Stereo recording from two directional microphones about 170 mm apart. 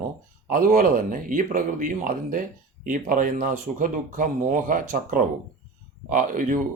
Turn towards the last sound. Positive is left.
turn(degrees=-55)  # may be behind; listen again after turning